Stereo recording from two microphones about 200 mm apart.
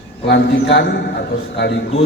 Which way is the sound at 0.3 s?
60° left (ahead or behind).